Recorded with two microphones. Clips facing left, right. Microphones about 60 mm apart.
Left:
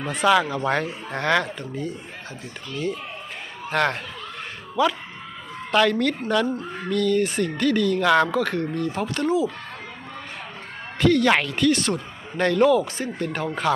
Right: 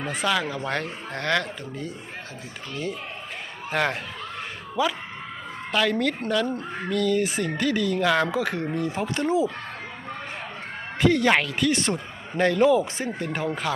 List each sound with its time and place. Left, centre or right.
0.3 s speech: centre
5.7 s speech: centre; by 9.5 s right
11.0 s speech: centre
11.3 s speech: centre
11.7 s speech: right
12.4 s speech: centre
13.2 s speech: centre